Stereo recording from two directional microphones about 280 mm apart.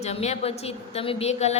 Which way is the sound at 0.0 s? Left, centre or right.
Left.